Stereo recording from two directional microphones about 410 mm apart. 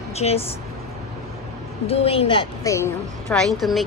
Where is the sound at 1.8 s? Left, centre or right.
Centre.